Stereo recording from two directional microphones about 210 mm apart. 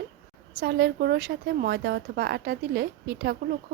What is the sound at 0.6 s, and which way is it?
Speech, 50° right (ahead or behind).